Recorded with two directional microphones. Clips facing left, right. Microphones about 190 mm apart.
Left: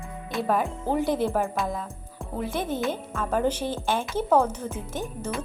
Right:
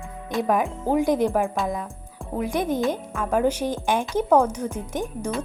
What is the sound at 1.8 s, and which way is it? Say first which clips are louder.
Music: right 1 dB; centre (ahead or behind).